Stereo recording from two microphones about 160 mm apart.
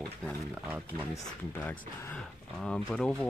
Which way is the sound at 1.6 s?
10° left (ahead or behind).